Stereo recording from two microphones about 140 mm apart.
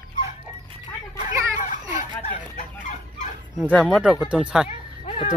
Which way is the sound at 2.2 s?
70° left (ahead or behind).